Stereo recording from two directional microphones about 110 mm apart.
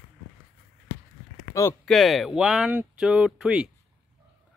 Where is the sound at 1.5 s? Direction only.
25° left (ahead or behind).